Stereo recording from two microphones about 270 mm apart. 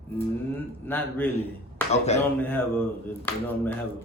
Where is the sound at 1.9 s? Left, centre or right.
Left.